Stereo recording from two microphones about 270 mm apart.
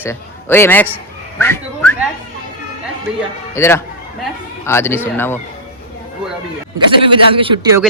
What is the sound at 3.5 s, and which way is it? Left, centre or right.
Speech, centre.